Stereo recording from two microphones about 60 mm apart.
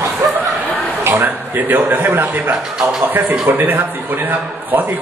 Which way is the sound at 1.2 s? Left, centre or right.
Right.